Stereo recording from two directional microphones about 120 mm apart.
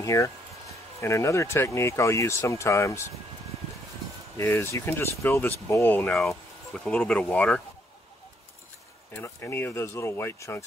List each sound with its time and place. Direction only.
0.0 s speech: 25° left (ahead or behind)
4.4 s speech: 20° left (ahead or behind)
6.1 s speech: centre (ahead or behind)
9.1 s speech: 20° left (ahead or behind)